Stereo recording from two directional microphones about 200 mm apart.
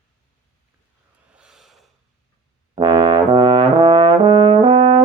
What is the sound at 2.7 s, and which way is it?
Trombone, 25° right (ahead or behind).